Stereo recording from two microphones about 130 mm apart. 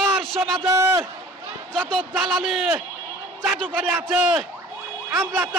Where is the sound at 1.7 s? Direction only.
10° left (ahead or behind).